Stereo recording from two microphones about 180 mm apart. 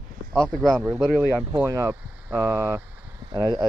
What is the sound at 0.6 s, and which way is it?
Speech, 5° right (ahead or behind).